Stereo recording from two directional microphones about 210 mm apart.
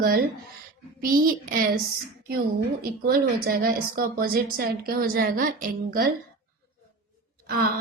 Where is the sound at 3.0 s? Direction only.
45° right (ahead or behind).